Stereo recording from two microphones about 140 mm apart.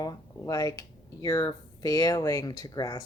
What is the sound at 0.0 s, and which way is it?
Speech, 25° left (ahead or behind).